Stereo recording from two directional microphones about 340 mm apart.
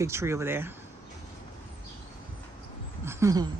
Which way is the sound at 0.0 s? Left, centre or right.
Centre.